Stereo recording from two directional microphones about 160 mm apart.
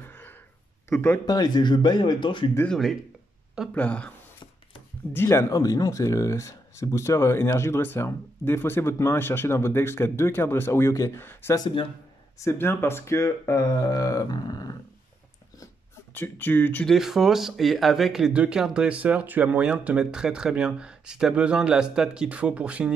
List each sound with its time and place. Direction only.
0.9 s speech: 10° left (ahead or behind)
1.2 s speech: 25° left (ahead or behind)
2.5 s speech: 10° left (ahead or behind)
5.1 s speech: 15° left (ahead or behind)
11.6 s speech: 35° left (ahead or behind)
12.4 s speech: 15° left (ahead or behind)
16.2 s speech: 10° left (ahead or behind)
16.9 s speech: centre (ahead or behind)